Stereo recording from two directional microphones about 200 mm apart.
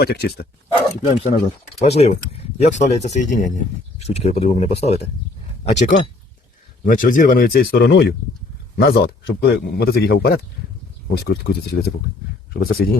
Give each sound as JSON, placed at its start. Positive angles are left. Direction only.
{"t": 0.0, "sound": "speech", "side_deg": 55}
{"t": 0.7, "sound": "speech", "side_deg": 25}
{"t": 6.8, "sound": "speech", "side_deg": 45}